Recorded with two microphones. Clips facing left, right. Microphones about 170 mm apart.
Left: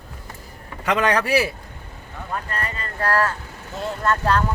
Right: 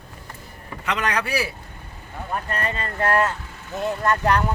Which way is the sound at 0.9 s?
40° left (ahead or behind).